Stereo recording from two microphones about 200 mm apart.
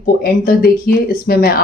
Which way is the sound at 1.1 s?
50° left (ahead or behind).